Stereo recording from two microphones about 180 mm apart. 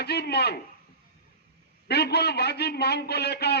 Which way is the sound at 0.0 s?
65° left (ahead or behind).